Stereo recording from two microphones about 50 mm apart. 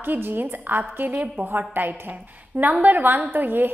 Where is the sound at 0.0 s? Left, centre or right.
Right.